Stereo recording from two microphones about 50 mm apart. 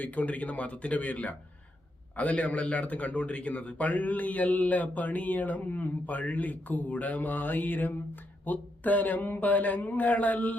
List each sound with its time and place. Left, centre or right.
0.0 s a man's voice: left